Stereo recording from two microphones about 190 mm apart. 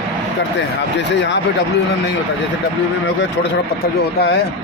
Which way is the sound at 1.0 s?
65° left (ahead or behind).